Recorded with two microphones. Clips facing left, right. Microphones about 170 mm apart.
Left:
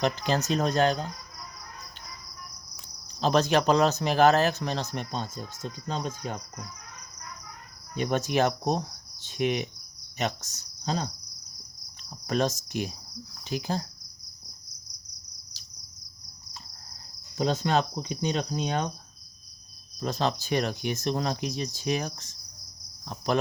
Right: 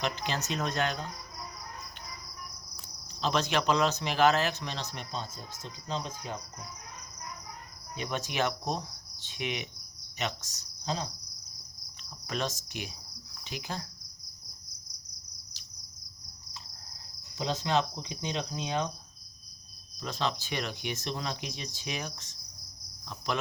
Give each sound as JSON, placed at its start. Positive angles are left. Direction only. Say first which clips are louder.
{"t": 0.0, "sound": "speech", "louder": "left 7 dB", "side_deg": 40}
{"t": 3.2, "sound": "speech", "louder": "left 6 dB", "side_deg": 40}
{"t": 5.6, "sound": "cricket", "louder": "left 4 dB", "side_deg": 50}
{"t": 7.9, "sound": "cricket", "louder": "left 7 dB", "side_deg": 45}
{"t": 9.2, "sound": "speech", "louder": "left 9 dB", "side_deg": 40}
{"t": 10.8, "sound": "insect", "louder": "left 4 dB", "side_deg": 55}
{"t": 12.3, "sound": "speech", "louder": "left 7 dB", "side_deg": 40}
{"t": 13.4, "sound": "cricket", "louder": "left 8 dB", "side_deg": 40}
{"t": 17.3, "sound": "cricket", "louder": "left 4 dB", "side_deg": 50}
{"t": 20.0, "sound": "speech", "louder": "left 5 dB", "side_deg": 40}